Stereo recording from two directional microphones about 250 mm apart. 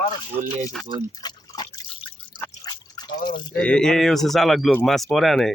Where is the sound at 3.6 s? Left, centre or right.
Centre.